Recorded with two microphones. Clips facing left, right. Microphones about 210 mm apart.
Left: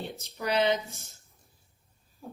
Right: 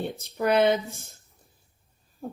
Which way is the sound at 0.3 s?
55° right (ahead or behind).